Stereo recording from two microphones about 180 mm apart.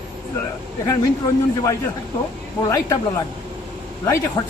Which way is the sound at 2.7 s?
20° left (ahead or behind).